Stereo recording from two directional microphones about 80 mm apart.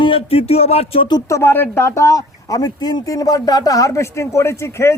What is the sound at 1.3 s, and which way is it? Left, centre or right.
Speech, left.